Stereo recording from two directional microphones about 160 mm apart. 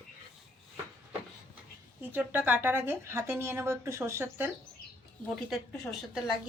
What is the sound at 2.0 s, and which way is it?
Speech, 10° right (ahead or behind).